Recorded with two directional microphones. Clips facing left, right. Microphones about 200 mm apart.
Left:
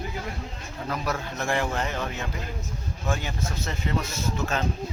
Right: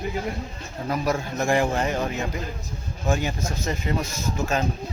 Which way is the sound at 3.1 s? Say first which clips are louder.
Right 5 dB; 15° right (ahead or behind).